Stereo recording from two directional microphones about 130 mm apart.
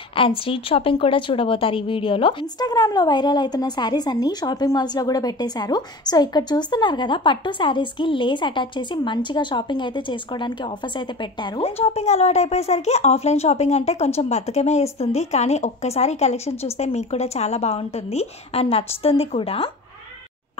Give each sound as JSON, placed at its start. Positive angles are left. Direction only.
{"t": 0.1, "sound": "a woman's voice", "side_deg": 45}
{"t": 2.7, "sound": "speech", "side_deg": 30}
{"t": 11.6, "sound": "a woman's voice", "side_deg": 55}